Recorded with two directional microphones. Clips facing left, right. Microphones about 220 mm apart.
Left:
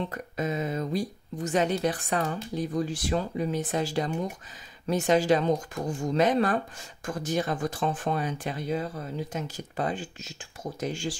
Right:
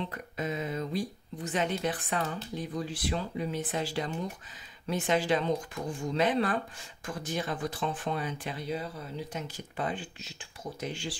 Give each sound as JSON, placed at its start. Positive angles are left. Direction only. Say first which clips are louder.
{"t": 0.0, "sound": "speech", "louder": "left 4 dB", "side_deg": 45}